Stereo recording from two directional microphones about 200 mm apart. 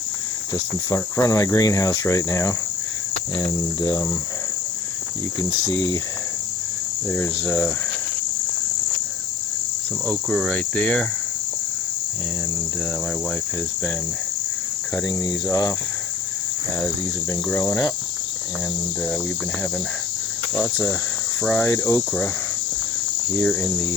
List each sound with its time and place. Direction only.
0.5 s speech: 15° left (ahead or behind)
5.4 s speech: 20° left (ahead or behind)
7.1 s speech: 10° left (ahead or behind)
10.2 s cricket: centre (ahead or behind)
15.4 s speech: 15° left (ahead or behind)
17.5 s speech: 10° left (ahead or behind)
21.4 s cricket: 5° left (ahead or behind)
21.7 s speech: 15° left (ahead or behind)
23.3 s speech: 5° left (ahead or behind)